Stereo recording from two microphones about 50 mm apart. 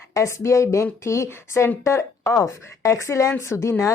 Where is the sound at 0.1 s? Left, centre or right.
Left.